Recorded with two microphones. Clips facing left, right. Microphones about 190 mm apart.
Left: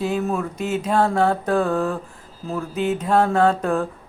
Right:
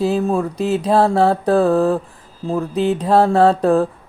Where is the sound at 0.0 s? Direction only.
30° right (ahead or behind).